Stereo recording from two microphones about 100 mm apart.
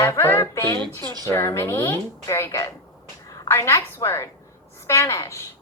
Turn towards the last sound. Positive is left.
turn(degrees=30)  # may be behind; listen again after turning